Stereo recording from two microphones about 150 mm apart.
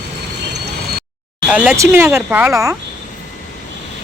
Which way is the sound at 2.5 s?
20° right (ahead or behind).